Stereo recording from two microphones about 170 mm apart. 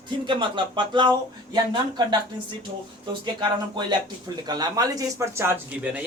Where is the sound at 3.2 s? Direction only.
25° right (ahead or behind).